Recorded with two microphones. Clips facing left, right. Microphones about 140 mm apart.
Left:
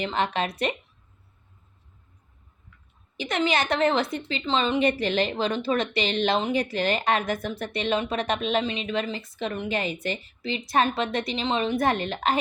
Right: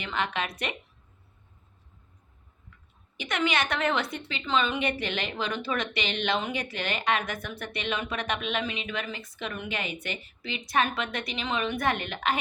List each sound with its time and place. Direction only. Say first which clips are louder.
0.0 s a woman's voice: left 5 dB; 35° left (ahead or behind)
3.2 s a woman's voice: left 3 dB; 30° left (ahead or behind)